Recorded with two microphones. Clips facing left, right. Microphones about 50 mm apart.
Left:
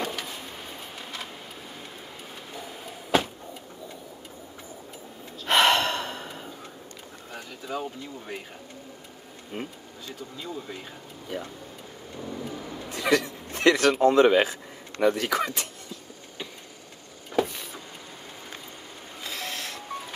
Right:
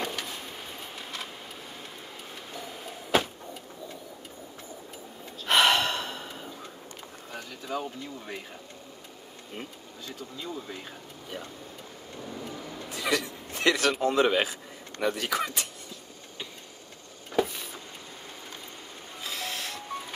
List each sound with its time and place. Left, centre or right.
0.0 s vehicle: centre
2.5 s a sound: centre
5.4 s gasp: centre
7.3 s speech: centre
9.5 s speech: left
12.2 s vehicle: centre
13.0 s speech: centre
13.5 s speech: centre
17.4 s vehicle: centre
19.2 s music: centre